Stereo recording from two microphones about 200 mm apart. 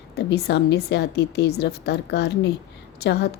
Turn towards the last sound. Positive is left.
turn(degrees=55)  # may be behind; listen again after turning